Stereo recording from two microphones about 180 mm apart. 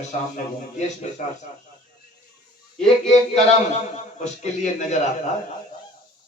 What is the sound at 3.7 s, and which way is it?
Speech, 40° left (ahead or behind).